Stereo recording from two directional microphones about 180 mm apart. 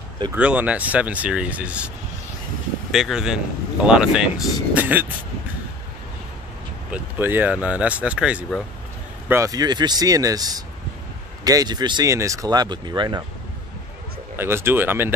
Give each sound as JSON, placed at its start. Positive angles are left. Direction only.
{"t": 0.4, "sound": "speech", "side_deg": -5}
{"t": 2.9, "sound": "speech", "side_deg": -5}
{"t": 6.9, "sound": "speech", "side_deg": -10}
{"t": 9.3, "sound": "speech", "side_deg": -20}
{"t": 14.3, "sound": "speech", "side_deg": -15}